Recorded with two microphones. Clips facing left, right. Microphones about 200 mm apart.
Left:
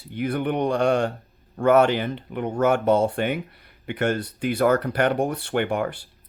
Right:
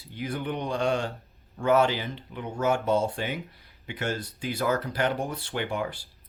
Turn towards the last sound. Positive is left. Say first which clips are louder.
# left 6 dB
turn(degrees=55)  # may be behind; listen again after turning